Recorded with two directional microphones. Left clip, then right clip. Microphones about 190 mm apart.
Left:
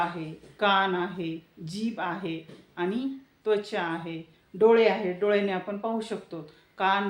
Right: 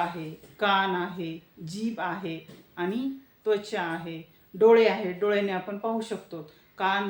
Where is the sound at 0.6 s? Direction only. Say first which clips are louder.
Left 1 dB; 10° left (ahead or behind).